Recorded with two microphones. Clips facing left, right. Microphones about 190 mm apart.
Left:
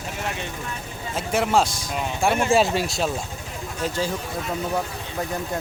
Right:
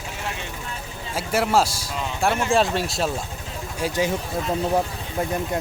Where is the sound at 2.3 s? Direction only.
10° left (ahead or behind).